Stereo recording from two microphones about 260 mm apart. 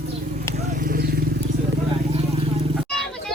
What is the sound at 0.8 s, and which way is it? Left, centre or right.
Vehicle, right.